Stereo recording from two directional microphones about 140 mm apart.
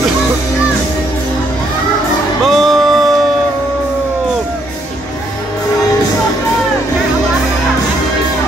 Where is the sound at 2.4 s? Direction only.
Centre (ahead or behind).